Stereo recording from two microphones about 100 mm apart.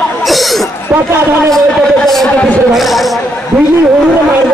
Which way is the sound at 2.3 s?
15° left (ahead or behind).